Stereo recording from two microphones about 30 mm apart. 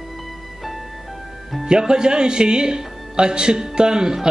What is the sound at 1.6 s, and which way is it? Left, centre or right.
Speech, right.